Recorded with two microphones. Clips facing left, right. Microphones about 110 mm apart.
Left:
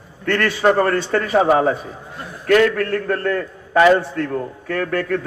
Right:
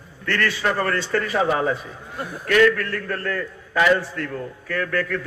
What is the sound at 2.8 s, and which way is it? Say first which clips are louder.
Speech: left 7 dB; 55° left (ahead or behind).